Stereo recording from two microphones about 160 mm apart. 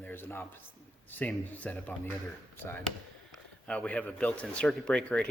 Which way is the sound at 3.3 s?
5° left (ahead or behind).